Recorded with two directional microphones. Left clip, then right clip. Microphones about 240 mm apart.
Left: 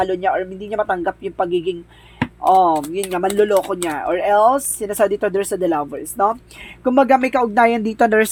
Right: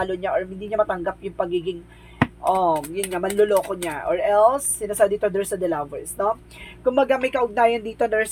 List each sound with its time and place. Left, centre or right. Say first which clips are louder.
0.0 s speech: left 5 dB; left